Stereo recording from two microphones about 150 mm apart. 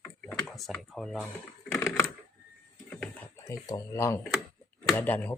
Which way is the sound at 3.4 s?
20° left (ahead or behind).